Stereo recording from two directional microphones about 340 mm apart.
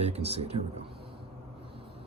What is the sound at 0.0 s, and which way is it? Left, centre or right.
Speech, centre.